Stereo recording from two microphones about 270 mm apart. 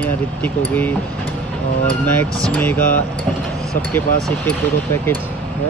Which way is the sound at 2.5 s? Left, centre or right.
Centre.